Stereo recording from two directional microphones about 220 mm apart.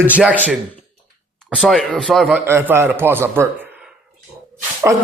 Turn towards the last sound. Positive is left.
turn(degrees=-10)  # may be behind; listen again after turning